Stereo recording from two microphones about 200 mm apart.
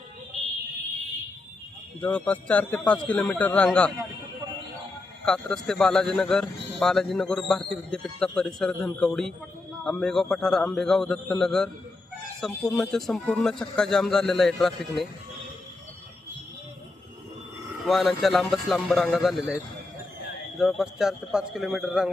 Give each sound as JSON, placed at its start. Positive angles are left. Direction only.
{"t": 2.0, "sound": "speech", "side_deg": 5}
{"t": 5.2, "sound": "speech", "side_deg": 5}
{"t": 17.8, "sound": "speech", "side_deg": 0}
{"t": 20.6, "sound": "speech", "side_deg": 0}